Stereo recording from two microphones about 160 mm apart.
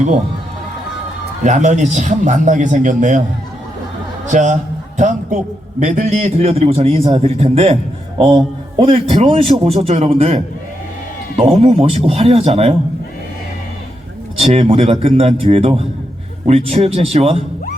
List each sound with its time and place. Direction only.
1.5 s a man's voice: 50° right (ahead or behind)
4.3 s a man's voice: 50° right (ahead or behind)
8.8 s a man's voice: 35° right (ahead or behind)
14.3 s a man's voice: 40° right (ahead or behind)